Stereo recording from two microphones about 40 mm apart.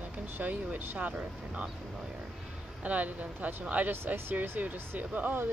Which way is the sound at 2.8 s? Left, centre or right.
Right.